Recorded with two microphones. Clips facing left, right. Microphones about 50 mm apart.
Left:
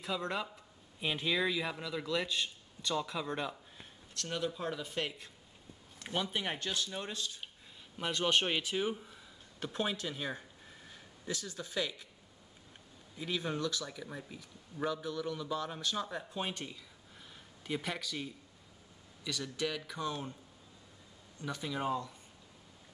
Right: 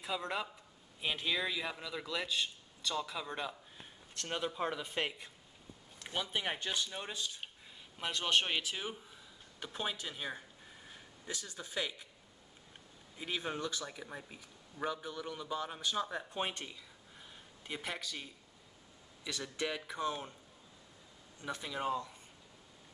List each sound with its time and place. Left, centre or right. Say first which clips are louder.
0.0 s a man's voice: left 1 dB; centre
4.1 s speech: left 1 dB; right
5.9 s a man's voice: left 2 dB; centre
8.0 s a man's voice: left 2 dB; centre
11.2 s a man's voice: left 4 dB; right
13.2 s a man's voice: left 3 dB; centre
16.6 s a sound: left 2 dB; centre
19.2 s speech: left 2 dB; right
21.4 s a man's voice: left 2 dB; centre